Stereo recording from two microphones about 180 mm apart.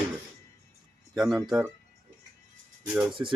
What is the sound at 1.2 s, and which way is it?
Speech, 5° right (ahead or behind).